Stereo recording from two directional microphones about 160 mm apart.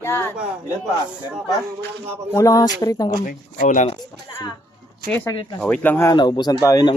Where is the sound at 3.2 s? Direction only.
55° left (ahead or behind).